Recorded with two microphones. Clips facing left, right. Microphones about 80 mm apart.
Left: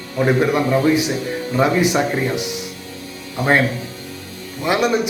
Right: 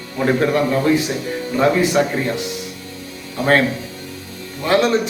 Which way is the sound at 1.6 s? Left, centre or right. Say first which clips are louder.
Right 1 dB; centre.